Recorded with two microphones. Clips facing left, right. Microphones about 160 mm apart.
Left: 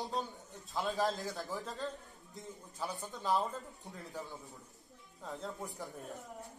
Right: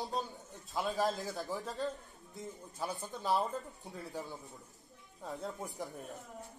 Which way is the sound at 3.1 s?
10° right (ahead or behind).